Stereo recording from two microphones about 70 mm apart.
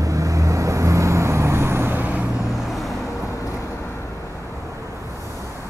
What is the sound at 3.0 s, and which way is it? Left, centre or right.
Vehicle, left.